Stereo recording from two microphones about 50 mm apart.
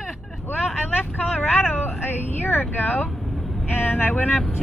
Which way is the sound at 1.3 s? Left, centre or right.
Left.